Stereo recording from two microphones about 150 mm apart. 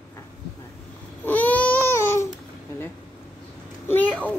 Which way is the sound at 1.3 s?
10° left (ahead or behind).